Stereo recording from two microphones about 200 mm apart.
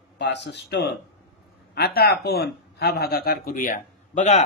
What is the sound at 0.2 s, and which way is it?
A man's voice, 60° left (ahead or behind).